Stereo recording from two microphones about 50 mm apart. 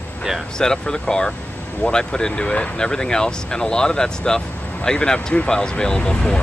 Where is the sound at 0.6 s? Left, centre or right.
Centre.